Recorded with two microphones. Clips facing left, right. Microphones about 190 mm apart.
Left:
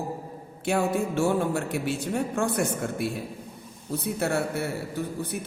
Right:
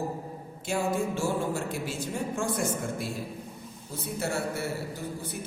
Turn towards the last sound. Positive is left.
turn(degrees=60)  # may be behind; listen again after turning